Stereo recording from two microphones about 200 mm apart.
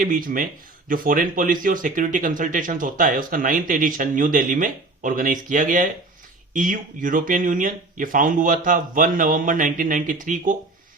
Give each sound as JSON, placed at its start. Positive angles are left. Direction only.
{"t": 0.0, "sound": "speech", "side_deg": -45}